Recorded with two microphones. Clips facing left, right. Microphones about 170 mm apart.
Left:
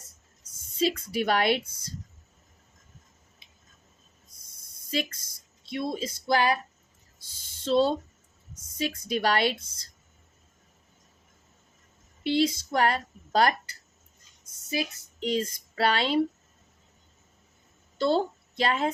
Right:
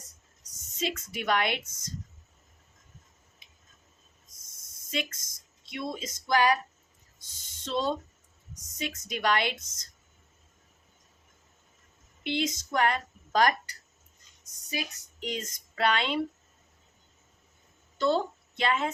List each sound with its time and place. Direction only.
0.8 s speech: 35° left (ahead or behind)
4.9 s speech: 35° left (ahead or behind)
12.2 s speech: 35° left (ahead or behind)
17.9 s a woman's voice: 30° left (ahead or behind)